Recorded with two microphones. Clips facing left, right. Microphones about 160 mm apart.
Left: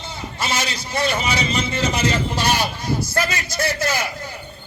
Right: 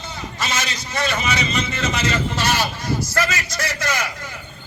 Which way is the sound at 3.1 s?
30° left (ahead or behind).